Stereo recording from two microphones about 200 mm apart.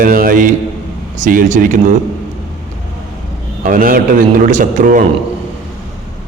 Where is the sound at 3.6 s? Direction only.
45° right (ahead or behind).